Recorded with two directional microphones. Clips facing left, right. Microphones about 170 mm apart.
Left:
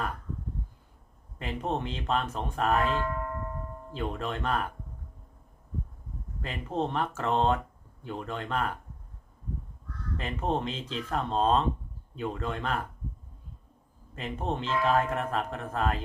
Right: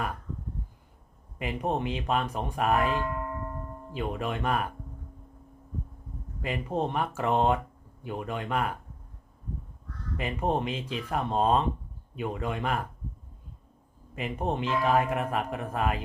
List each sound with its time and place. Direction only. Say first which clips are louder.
1.4 s speech: right 2 dB; 10° right (ahead or behind)
6.4 s speech: right 2 dB; 10° right (ahead or behind)
10.2 s speech: right 2 dB; 10° right (ahead or behind)
14.2 s speech: right 2 dB; 15° right (ahead or behind)